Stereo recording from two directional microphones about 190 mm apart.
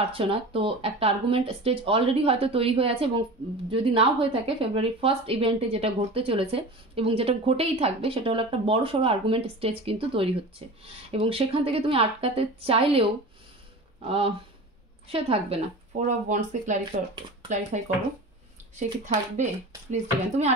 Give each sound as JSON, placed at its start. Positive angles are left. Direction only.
{"t": 0.0, "sound": "a woman's voice", "side_deg": -30}
{"t": 14.0, "sound": "a woman's voice", "side_deg": -30}
{"t": 16.1, "sound": "a woman's voice", "side_deg": -40}